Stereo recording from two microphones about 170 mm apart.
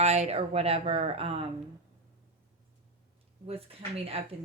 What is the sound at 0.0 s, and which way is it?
Speech, 40° right (ahead or behind).